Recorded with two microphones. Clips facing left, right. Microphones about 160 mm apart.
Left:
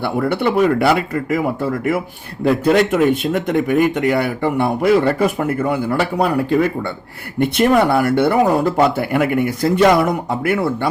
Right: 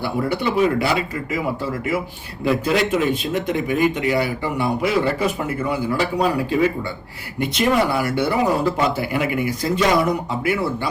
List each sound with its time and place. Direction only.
0.0 s speech: 55° left (ahead or behind)